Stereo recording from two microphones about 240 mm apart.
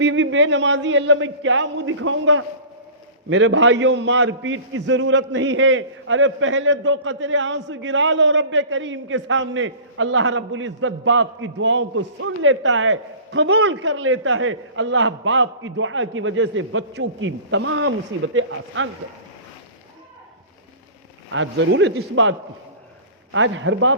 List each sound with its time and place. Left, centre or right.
0.0 s a man's voice: right
21.2 s a man's voice: right